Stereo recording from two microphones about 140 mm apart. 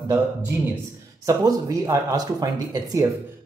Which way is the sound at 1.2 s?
25° right (ahead or behind).